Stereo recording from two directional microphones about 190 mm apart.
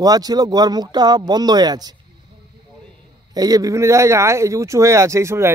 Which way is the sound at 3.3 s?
20° right (ahead or behind).